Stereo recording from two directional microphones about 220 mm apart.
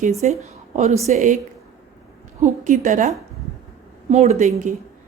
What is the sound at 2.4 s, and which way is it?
Speech, 35° right (ahead or behind).